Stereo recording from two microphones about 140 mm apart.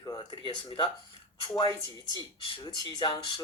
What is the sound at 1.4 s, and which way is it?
Speech, 30° left (ahead or behind).